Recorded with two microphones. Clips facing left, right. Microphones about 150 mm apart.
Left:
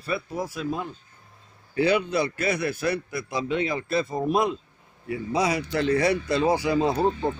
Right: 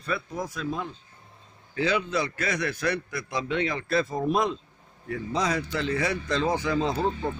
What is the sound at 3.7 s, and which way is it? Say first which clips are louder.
Speech: left 1 dB; 5° left (ahead or behind).